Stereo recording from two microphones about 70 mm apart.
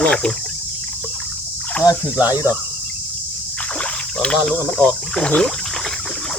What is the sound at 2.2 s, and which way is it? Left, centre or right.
Speech, right.